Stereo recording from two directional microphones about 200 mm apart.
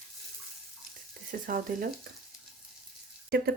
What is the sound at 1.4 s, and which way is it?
Speech, 45° right (ahead or behind).